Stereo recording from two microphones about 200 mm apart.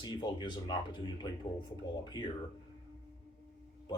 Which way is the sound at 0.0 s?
20° left (ahead or behind).